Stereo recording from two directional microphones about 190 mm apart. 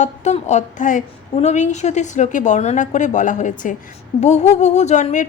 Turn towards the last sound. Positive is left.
turn(degrees=40)  # may be behind; listen again after turning